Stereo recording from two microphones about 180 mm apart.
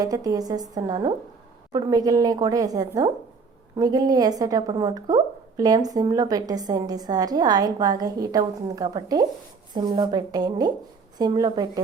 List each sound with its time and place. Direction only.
0.0 s a woman's voice: 20° right (ahead or behind)